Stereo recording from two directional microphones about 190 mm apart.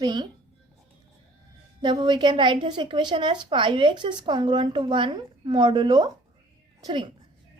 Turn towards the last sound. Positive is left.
turn(degrees=-25)  # may be behind; listen again after turning